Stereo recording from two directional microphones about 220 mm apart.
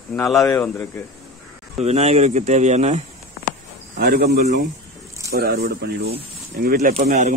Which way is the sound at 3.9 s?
45° right (ahead or behind).